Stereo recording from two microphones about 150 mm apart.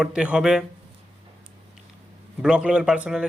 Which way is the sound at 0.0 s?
5° right (ahead or behind).